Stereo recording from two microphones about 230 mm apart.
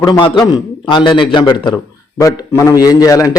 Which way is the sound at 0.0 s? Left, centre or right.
Centre.